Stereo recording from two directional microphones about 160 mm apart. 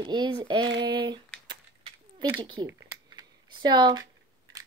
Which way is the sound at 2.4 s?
25° right (ahead or behind).